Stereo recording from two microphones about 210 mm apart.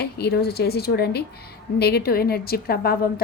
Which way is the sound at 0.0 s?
50° left (ahead or behind).